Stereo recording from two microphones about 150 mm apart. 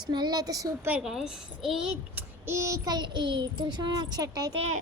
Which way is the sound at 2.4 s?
20° right (ahead or behind).